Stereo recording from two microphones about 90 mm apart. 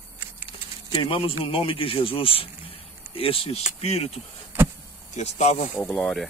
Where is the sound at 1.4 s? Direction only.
80° left.